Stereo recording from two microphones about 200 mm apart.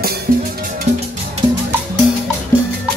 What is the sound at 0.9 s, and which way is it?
Music, 35° right (ahead or behind).